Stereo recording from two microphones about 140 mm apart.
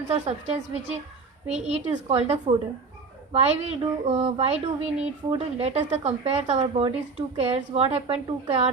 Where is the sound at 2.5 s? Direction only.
40° right (ahead or behind).